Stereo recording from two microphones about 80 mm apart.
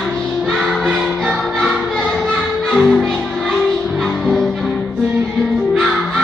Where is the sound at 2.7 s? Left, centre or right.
Centre.